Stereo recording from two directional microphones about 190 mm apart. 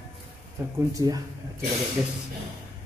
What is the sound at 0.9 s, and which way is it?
Speech, 15° right (ahead or behind).